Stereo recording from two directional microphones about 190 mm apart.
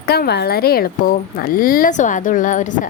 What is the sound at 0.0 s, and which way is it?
A woman's voice, 55° left (ahead or behind).